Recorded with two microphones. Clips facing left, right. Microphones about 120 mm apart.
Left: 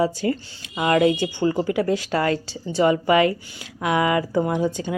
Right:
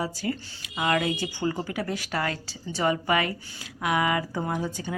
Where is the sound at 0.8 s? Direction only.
35° left (ahead or behind).